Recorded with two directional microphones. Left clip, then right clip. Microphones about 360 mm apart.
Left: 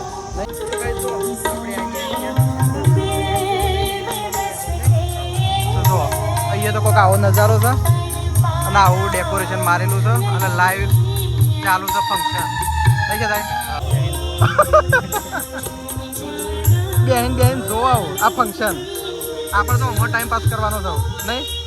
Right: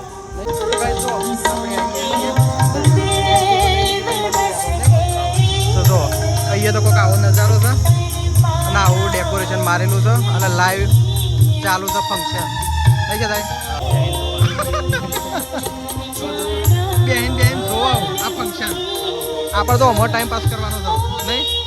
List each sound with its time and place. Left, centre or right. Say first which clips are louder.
2.6 s music: right 3 dB; right
6.5 s speech: right 1 dB; centre
14.4 s speech: left 13 dB; centre
17.1 s speech: left 3 dB; centre